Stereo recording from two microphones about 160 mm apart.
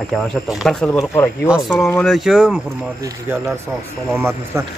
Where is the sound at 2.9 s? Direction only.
15° right (ahead or behind).